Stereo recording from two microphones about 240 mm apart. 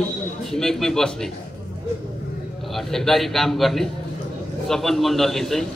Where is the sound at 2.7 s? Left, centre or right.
Centre.